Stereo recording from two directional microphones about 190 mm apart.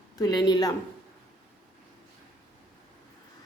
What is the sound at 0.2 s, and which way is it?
Speech, 20° left (ahead or behind).